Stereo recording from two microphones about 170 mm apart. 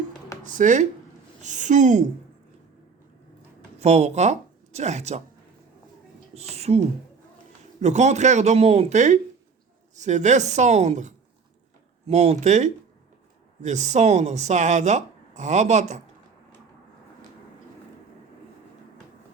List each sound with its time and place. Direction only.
0.4 s speech: 50° right (ahead or behind)
3.8 s speech: 40° right (ahead or behind)
6.3 s speech: 40° right (ahead or behind)